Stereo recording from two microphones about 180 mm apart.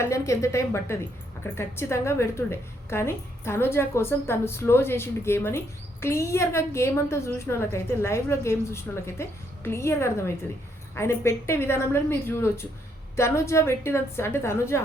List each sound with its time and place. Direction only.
0.0 s a woman's voice: 15° left (ahead or behind)